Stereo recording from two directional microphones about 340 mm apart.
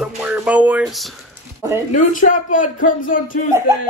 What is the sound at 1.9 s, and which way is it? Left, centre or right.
A man's voice, left.